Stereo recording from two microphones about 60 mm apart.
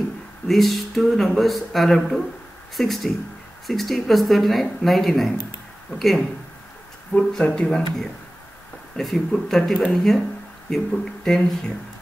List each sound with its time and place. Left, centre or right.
0.5 s speech: centre
7.1 s speech: left
7.4 s speech: centre
11.2 s speech: centre